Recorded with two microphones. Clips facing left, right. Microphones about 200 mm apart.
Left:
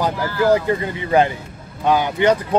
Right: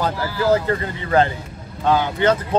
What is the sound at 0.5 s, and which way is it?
Speech, 15° left (ahead or behind).